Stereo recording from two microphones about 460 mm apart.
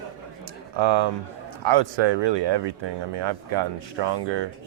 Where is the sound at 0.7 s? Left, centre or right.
Right.